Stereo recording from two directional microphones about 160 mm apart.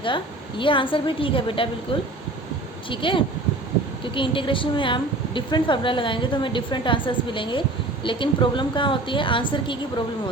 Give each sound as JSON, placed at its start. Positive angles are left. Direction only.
{"t": 0.6, "sound": "a woman's voice", "side_deg": 30}
{"t": 2.9, "sound": "a woman's voice", "side_deg": 30}